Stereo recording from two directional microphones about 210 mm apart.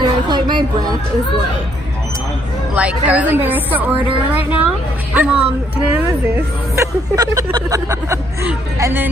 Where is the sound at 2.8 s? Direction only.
5° right (ahead or behind).